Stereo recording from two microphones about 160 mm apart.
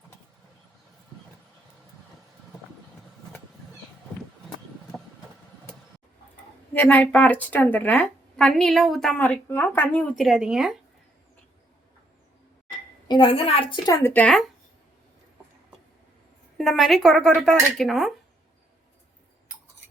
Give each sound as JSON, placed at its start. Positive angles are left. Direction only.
{"t": 6.7, "sound": "a woman's voice", "side_deg": 10}
{"t": 10.2, "sound": "speech", "side_deg": -5}
{"t": 13.1, "sound": "a woman's voice", "side_deg": 30}
{"t": 14.0, "sound": "a woman's voice", "side_deg": 10}
{"t": 16.6, "sound": "speech", "side_deg": 0}